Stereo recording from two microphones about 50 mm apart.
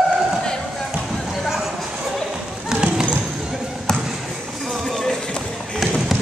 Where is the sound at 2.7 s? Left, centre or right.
Centre.